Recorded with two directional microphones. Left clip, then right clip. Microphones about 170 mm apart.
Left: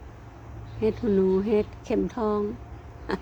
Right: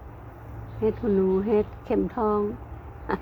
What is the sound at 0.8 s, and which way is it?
A woman's voice, 25° left (ahead or behind).